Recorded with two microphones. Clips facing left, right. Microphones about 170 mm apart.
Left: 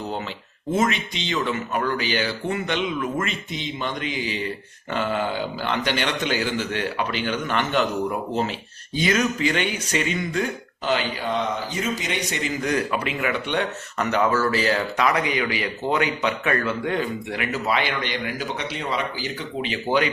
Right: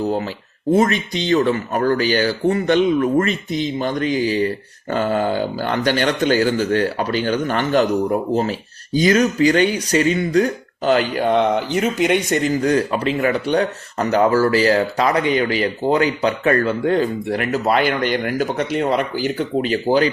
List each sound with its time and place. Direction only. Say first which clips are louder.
0.0 s speech: right 9 dB; 35° right (ahead or behind)